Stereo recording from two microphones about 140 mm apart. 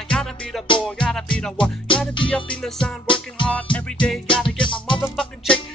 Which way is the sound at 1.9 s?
35° left (ahead or behind).